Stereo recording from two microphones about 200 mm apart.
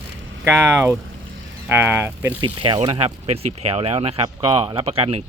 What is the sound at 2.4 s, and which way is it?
Speech, 25° right (ahead or behind).